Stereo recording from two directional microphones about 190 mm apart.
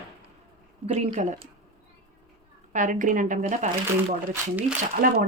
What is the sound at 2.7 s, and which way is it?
Speech, 40° right (ahead or behind).